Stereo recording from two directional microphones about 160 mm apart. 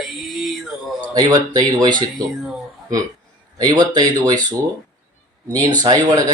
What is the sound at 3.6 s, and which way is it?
Speech, 25° right (ahead or behind).